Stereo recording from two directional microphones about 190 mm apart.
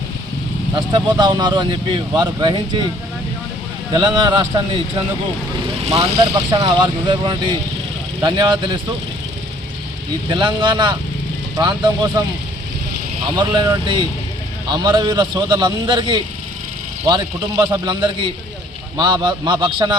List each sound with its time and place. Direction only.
0.7 s speech: 20° right (ahead or behind)
3.9 s speech: 20° right (ahead or behind)
10.2 s speech: 25° right (ahead or behind)
13.3 s speech: 20° right (ahead or behind)